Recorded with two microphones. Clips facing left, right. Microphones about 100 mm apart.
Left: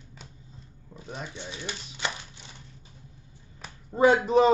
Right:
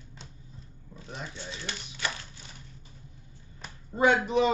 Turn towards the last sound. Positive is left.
turn(degrees=40)  # may be behind; listen again after turning